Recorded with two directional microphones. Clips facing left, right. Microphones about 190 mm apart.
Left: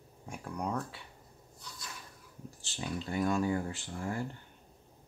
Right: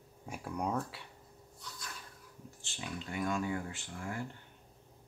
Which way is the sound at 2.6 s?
35° left (ahead or behind).